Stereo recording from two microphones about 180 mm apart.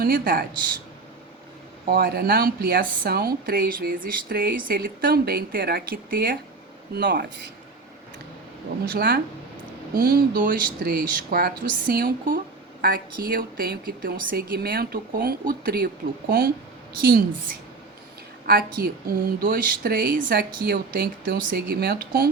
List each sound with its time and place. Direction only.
0.0 s speech: 55° right (ahead or behind)
1.9 s speech: 60° right (ahead or behind)
6.9 s speech: 70° right (ahead or behind)
8.9 s a woman's voice: 60° right (ahead or behind)
17.0 s speech: 55° right (ahead or behind)
18.4 s a woman's voice: 55° right (ahead or behind)